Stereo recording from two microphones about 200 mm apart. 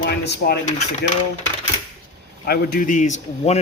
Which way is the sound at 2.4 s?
45° left (ahead or behind).